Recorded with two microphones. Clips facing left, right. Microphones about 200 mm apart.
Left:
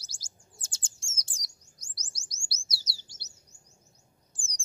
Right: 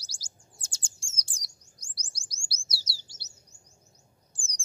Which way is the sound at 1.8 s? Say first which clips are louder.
Right 1 dB; 20° left (ahead or behind).